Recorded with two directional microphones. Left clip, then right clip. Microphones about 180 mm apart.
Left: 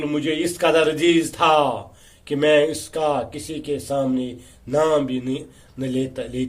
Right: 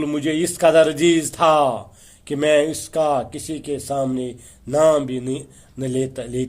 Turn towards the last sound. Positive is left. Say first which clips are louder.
# right 2 dB
turn(degrees=-45)  # may be behind; listen again after turning